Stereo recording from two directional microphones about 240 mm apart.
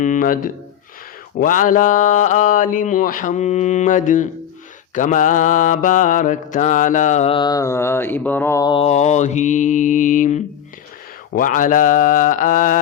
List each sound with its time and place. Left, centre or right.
0.0 s mantra: left